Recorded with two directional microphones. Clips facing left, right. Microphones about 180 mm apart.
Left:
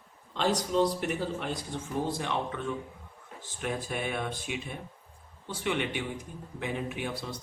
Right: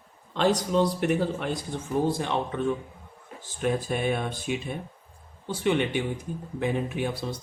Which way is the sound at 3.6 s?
30° right (ahead or behind).